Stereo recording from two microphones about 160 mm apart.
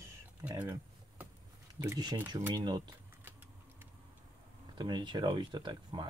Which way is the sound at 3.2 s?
15° right (ahead or behind).